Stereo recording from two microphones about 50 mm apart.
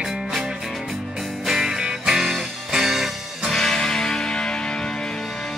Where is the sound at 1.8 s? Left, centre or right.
Centre.